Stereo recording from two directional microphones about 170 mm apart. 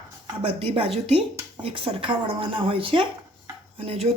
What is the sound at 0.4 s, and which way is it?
Speech, 35° right (ahead or behind).